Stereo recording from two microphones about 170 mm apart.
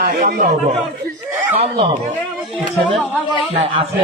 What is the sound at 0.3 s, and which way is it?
Speech, 60° right (ahead or behind).